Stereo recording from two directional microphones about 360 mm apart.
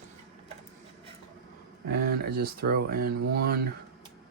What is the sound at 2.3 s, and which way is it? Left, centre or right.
Speech, right.